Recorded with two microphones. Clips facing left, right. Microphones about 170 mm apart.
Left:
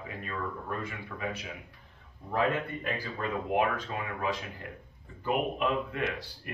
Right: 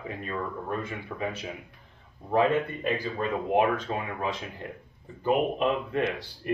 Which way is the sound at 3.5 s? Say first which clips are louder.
Right 5 dB; 25° right (ahead or behind).